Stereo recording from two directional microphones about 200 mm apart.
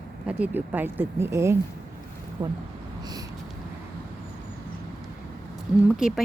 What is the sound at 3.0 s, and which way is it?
Vehicle, 20° right (ahead or behind).